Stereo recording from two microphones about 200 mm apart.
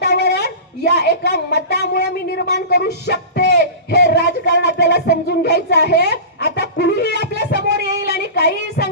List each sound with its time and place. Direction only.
0.0 s a woman's voice: 55° left (ahead or behind)
8.0 s child singing: 55° left (ahead or behind)